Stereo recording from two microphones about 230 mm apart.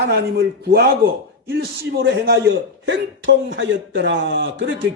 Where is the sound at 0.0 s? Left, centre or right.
Right.